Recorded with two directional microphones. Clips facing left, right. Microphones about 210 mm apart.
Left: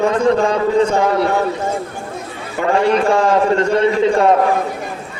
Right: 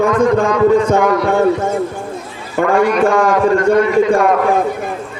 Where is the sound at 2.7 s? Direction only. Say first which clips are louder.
Right 1 dB; 30° left (ahead or behind).